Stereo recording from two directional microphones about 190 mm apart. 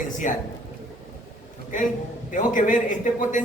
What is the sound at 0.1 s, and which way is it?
Speech, 40° left (ahead or behind).